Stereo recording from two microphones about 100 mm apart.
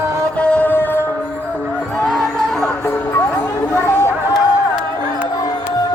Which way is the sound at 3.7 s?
30° left (ahead or behind).